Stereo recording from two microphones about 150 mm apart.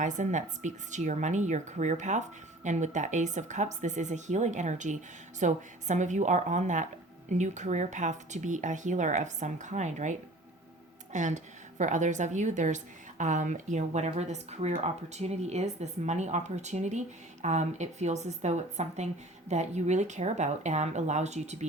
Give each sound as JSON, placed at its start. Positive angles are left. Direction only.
{"t": 0.0, "sound": "a woman's voice", "side_deg": -55}